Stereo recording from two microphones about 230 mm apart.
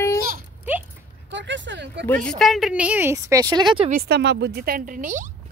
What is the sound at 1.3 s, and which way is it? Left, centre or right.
Speech, right.